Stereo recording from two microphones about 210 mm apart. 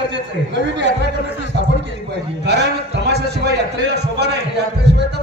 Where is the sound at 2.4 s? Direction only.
55° right (ahead or behind).